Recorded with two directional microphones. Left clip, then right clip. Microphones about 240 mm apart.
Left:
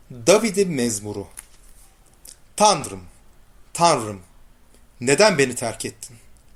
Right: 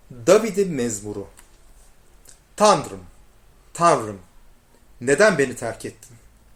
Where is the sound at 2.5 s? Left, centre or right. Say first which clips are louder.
Right 1 dB; left.